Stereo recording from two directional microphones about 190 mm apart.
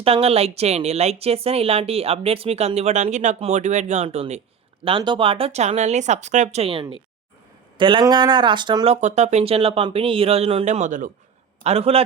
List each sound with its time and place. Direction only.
0.0 s speech: 30° right (ahead or behind)